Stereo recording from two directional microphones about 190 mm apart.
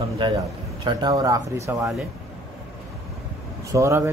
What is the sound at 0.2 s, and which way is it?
A man's voice, 25° right (ahead or behind).